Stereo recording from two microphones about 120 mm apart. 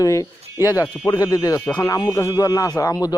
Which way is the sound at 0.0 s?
30° left (ahead or behind).